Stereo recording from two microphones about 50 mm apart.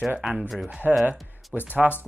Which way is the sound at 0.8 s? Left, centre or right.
Right.